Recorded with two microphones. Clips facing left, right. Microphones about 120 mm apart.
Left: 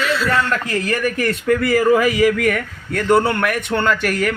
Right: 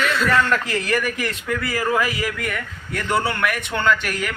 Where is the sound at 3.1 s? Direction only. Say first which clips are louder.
Left 7 dB; 25° left (ahead or behind).